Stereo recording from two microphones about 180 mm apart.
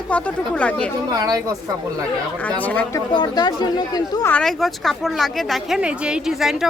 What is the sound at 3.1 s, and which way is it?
Speech, 25° left (ahead or behind).